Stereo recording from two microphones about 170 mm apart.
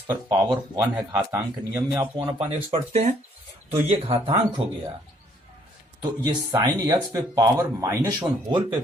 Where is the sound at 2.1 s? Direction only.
35° right (ahead or behind).